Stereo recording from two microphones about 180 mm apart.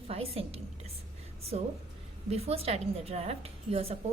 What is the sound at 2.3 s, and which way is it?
A woman's voice, 35° right (ahead or behind).